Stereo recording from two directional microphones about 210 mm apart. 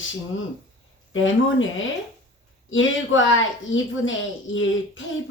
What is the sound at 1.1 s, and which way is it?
Speech, 65° left (ahead or behind).